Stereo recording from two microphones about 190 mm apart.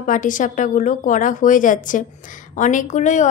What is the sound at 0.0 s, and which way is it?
A woman's voice, 45° left (ahead or behind).